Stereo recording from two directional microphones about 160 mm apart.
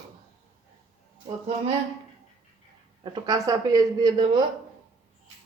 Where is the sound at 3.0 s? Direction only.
25° right (ahead or behind).